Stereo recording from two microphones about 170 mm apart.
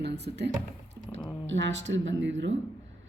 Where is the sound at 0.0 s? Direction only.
80° right.